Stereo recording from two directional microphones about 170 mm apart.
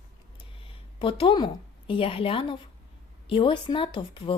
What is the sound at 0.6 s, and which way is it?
A woman's voice, 30° left (ahead or behind).